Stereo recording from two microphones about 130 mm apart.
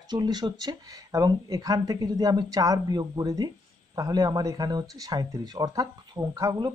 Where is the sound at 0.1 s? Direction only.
35° right (ahead or behind).